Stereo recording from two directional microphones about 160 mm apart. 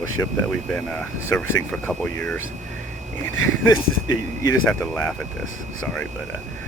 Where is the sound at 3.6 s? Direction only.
20° left (ahead or behind).